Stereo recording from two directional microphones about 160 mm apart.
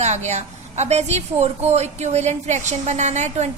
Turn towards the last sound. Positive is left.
turn(degrees=-45)  # may be behind; listen again after turning